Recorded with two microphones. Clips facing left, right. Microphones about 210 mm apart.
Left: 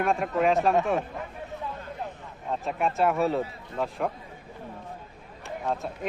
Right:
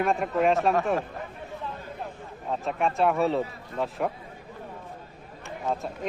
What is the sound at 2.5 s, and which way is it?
Speech, centre (ahead or behind).